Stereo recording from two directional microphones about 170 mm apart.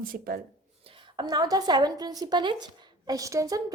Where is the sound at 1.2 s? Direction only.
25° right (ahead or behind).